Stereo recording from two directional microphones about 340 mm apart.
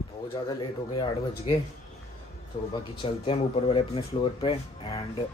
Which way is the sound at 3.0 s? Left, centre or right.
Centre.